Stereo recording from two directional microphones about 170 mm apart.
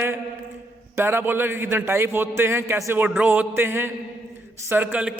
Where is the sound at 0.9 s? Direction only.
15° right (ahead or behind).